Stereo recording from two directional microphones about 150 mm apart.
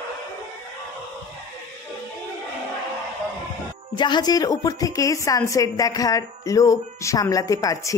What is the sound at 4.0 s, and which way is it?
A woman's voice, 30° left (ahead or behind).